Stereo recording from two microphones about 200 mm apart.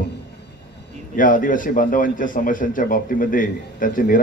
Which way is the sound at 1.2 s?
40° left (ahead or behind).